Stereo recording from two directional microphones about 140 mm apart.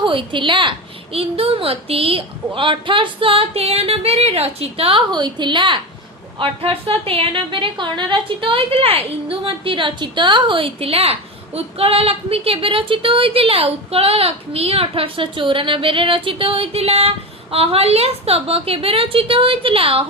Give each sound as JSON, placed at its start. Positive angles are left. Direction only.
{"t": 0.0, "sound": "a woman's voice", "side_deg": -35}